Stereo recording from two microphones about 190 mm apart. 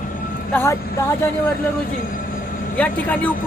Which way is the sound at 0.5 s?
15° left (ahead or behind).